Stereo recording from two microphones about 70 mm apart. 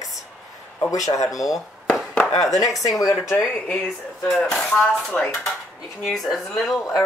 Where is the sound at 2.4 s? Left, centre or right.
Left.